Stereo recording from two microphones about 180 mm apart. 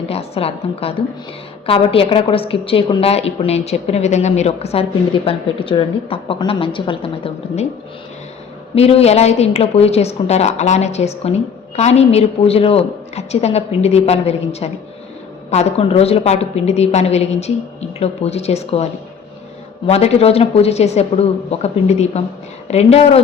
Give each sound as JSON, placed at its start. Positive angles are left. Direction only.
{"t": 0.1, "sound": "a woman's voice", "side_deg": 35}
{"t": 8.7, "sound": "a woman's voice", "side_deg": 35}
{"t": 19.9, "sound": "a woman's voice", "side_deg": 35}